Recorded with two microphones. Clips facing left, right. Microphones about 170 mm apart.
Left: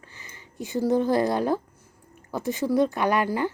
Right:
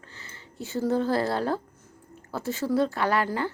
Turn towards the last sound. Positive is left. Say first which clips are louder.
# left 2 dB
turn(degrees=15)  # may be behind; listen again after turning